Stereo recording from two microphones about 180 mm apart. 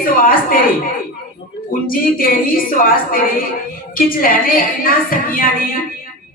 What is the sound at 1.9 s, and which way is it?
Speech, 50° left (ahead or behind).